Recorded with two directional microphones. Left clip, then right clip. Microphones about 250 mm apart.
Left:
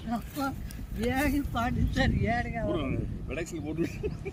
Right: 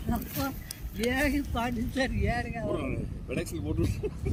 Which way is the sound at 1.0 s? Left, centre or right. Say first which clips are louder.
Right 1 dB; right.